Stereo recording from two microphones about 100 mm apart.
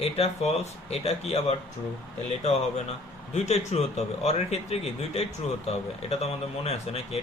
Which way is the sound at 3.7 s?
90° left.